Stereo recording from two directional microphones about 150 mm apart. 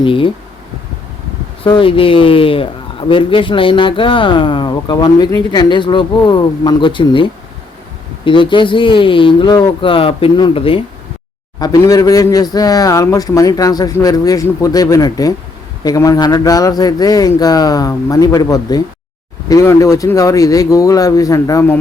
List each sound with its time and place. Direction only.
0.0 s speech: 35° left (ahead or behind)
1.6 s speech: 35° left (ahead or behind)
11.6 s speech: 25° left (ahead or behind)